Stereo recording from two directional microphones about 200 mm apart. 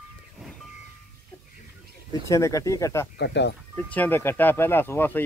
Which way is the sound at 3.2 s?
60° left (ahead or behind).